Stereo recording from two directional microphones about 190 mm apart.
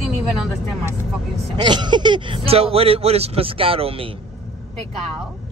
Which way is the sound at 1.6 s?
20° right (ahead or behind).